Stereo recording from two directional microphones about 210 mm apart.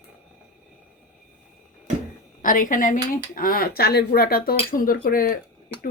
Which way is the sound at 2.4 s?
40° left (ahead or behind).